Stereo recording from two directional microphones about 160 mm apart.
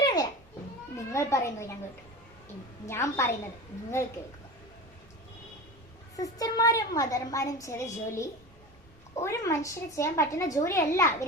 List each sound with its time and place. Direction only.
0.0 s children playing: 25° left (ahead or behind)
0.9 s speech: 15° left (ahead or behind)
2.8 s a woman's voice: 20° left (ahead or behind)
6.1 s a woman's voice: 20° left (ahead or behind)